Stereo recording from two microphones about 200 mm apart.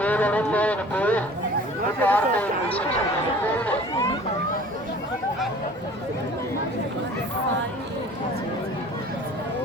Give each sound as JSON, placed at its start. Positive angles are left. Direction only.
{"t": 0.0, "sound": "speech", "side_deg": 5}